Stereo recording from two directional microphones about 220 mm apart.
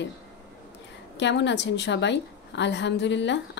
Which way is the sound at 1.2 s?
55° left (ahead or behind).